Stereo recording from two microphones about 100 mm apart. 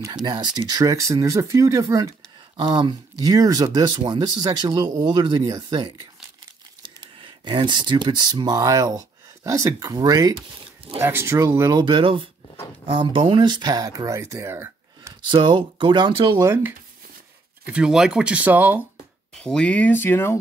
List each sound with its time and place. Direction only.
0.1 s speech: 45° right (ahead or behind)
2.5 s speech: 50° right (ahead or behind)
4.0 s speech: 55° right (ahead or behind)
6.8 s speech: 55° right (ahead or behind); by 10.4 s 40° right (ahead or behind)
11.0 s speech: 25° right (ahead or behind)
11.8 s speech: 55° right (ahead or behind); by 15.1 s 25° right (ahead or behind)
15.2 s speech: 50° right (ahead or behind)
17.6 s speech: 10° right (ahead or behind)
19.3 s speech: 10° left (ahead or behind)